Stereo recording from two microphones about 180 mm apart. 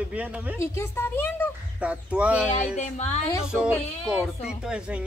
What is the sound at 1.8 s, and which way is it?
Speech, 5° right (ahead or behind).